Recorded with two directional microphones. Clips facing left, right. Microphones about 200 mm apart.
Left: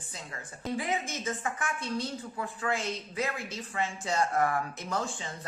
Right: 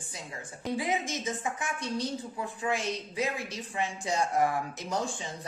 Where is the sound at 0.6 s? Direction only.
15° right (ahead or behind).